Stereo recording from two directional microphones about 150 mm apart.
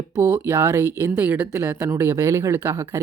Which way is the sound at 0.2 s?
15° right (ahead or behind).